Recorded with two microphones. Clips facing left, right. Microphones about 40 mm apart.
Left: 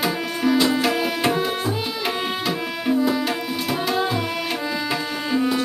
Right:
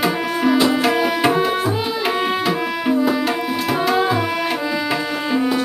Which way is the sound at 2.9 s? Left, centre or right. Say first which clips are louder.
Right 2 dB; centre.